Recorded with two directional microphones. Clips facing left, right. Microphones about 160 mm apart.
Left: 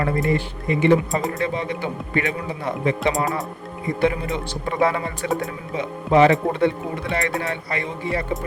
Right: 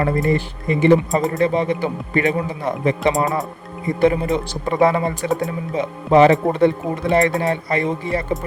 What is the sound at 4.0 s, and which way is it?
Speech, 40° right (ahead or behind).